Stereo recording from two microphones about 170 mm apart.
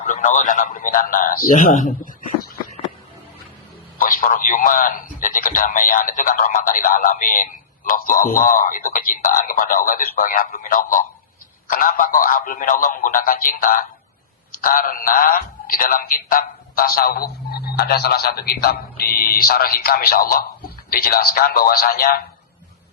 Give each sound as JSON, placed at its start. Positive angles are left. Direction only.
{"t": 0.0, "sound": "a man's voice", "side_deg": 45}
{"t": 3.9, "sound": "a man's voice", "side_deg": 55}